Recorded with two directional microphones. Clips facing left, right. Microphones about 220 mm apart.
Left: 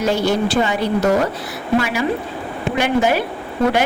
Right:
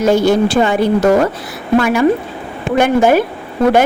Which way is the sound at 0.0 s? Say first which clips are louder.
Right 6 dB; 50° right (ahead or behind).